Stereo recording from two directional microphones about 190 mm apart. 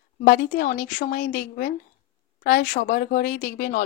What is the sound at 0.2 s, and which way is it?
Speech, 50° left (ahead or behind).